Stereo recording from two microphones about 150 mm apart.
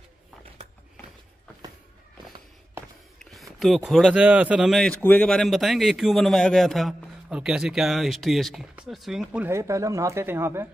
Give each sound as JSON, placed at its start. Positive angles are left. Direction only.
{"t": 3.2, "sound": "speech", "side_deg": 0}
{"t": 9.5, "sound": "speech", "side_deg": -20}